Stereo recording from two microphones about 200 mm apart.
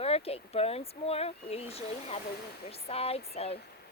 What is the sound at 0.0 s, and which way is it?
Speech, 30° left (ahead or behind).